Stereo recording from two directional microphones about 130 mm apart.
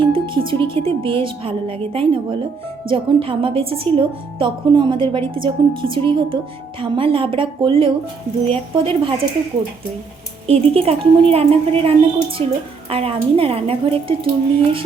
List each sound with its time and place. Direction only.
0.0 s a woman's voice: 40° right (ahead or behind)
10.4 s speech: 50° right (ahead or behind)